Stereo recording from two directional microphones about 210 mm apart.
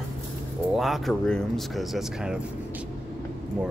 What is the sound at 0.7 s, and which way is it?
Speech, centre (ahead or behind).